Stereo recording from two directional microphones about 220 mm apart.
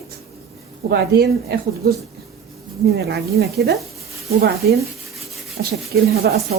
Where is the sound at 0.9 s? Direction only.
50° right (ahead or behind).